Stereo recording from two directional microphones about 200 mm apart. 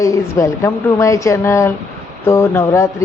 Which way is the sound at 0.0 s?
15° left (ahead or behind).